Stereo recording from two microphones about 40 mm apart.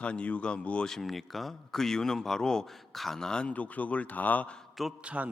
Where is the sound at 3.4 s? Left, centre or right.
Left.